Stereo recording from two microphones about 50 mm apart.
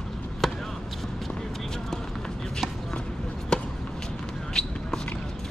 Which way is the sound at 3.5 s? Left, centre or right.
Centre.